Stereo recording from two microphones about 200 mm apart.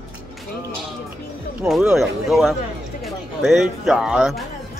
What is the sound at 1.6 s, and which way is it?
Speech, 5° right (ahead or behind).